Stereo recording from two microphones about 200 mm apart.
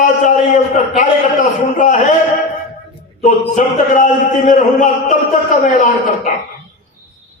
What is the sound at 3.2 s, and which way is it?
Speech, 35° left (ahead or behind).